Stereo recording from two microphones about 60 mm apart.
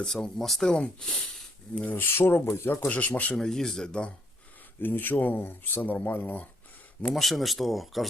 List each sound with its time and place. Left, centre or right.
0.0 s speech: centre
0.7 s speech: centre
1.8 s speech: left
2.8 s speech: left
3.3 s speech: centre
4.8 s speech: left
7.1 s speech: centre